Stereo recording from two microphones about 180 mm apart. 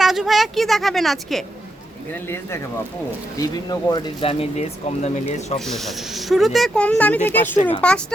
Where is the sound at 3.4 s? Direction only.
20° left (ahead or behind).